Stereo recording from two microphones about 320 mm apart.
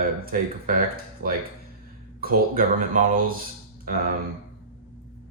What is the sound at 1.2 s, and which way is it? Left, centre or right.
Speech, right.